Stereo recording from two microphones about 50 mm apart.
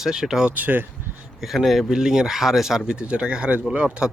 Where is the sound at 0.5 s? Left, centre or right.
Right.